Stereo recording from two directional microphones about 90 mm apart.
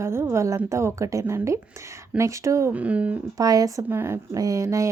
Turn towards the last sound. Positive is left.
turn(degrees=-35)  # may be behind; listen again after turning